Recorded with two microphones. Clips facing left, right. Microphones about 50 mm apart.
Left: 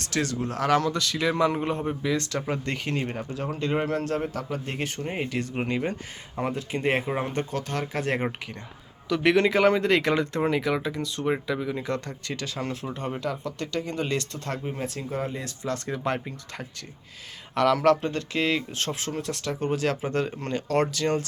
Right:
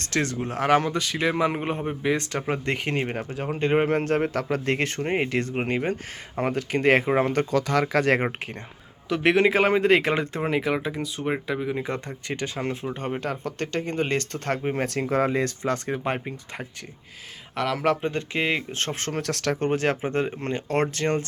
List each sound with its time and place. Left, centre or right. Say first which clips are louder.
0.0 s speech: right 1 dB; right
3.3 s speech: right 5 dB; right
4.4 s speech: right 6 dB; right
7.0 s speech: right 6 dB; right
7.3 s speech: right 6 dB; right
9.0 s speech: right 1 dB; centre; by 15.4 s right
15.4 s speech: right 4 dB; right
17.5 s speech: left 4 dB; centre; by 21.2 s right